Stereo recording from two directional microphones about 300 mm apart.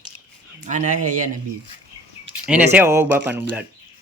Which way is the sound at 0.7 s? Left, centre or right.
Right.